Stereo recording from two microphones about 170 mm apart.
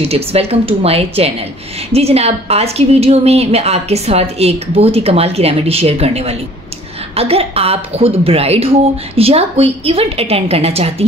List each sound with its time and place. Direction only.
0.0 s a woman's voice: 35° right (ahead or behind)